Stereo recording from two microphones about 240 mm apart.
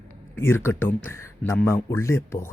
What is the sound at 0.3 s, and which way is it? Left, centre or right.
Speech, centre.